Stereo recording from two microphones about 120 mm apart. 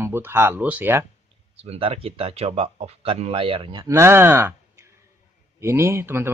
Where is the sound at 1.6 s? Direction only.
55° right (ahead or behind).